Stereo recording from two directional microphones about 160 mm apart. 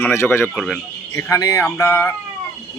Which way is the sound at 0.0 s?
15° left (ahead or behind).